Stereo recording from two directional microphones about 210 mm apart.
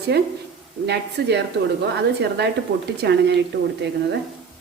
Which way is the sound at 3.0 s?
55° right (ahead or behind).